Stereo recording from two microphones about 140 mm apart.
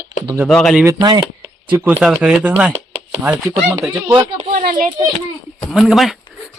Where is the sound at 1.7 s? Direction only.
10° right (ahead or behind).